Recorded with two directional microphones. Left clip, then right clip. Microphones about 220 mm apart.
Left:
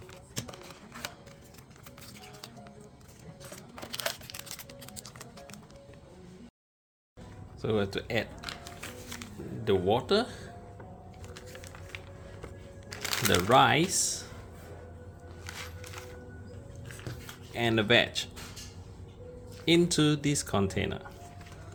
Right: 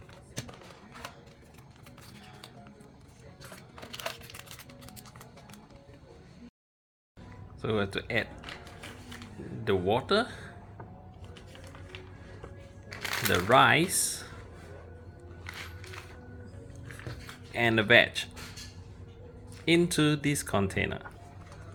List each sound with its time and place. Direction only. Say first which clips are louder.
7.6 s speech: even; 5° left (ahead or behind)
8.6 s a sound: left 3 dB; 35° left (ahead or behind)
9.6 s speech: left 1 dB; 10° left (ahead or behind)
11.3 s music: left 2 dB; 30° left (ahead or behind)
12.9 s crumpling: left 1 dB; 5° left (ahead or behind)
13.3 s speech: right 1 dB; 10° left (ahead or behind)
15.4 s music: even; centre (ahead or behind)
17.5 s speech: right 3 dB; centre (ahead or behind)
19.6 s speech: even; 5° left (ahead or behind)